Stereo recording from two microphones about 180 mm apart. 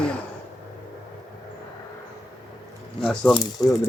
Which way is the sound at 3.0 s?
5° left (ahead or behind).